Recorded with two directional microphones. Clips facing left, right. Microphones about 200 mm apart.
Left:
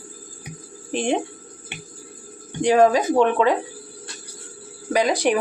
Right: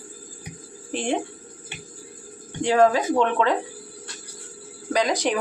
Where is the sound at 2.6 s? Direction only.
15° left (ahead or behind).